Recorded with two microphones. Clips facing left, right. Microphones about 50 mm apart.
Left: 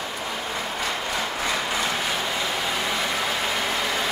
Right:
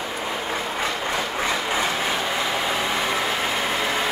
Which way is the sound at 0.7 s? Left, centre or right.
Right.